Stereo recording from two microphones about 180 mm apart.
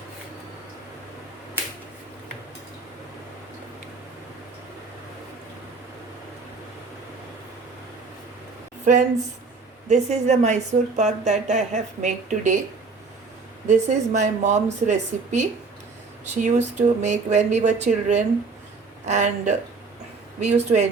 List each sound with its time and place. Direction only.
8.8 s speech: 40° right (ahead or behind)
13.7 s speech: 40° right (ahead or behind)